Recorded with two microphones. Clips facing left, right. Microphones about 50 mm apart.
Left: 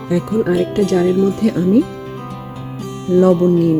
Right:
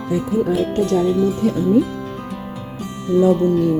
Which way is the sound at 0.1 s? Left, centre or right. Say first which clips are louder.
Left 3 dB; left.